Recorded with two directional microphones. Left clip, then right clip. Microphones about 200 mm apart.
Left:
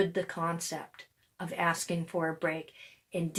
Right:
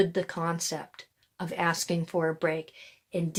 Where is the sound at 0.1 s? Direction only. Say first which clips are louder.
Right 2 dB; 50° right (ahead or behind).